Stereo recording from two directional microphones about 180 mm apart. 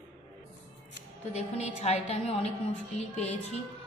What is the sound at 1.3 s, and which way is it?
A woman's voice, 35° left (ahead or behind).